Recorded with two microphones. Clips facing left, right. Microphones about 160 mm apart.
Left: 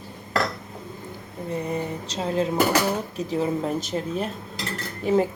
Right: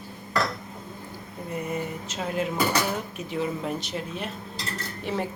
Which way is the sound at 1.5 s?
30° left (ahead or behind).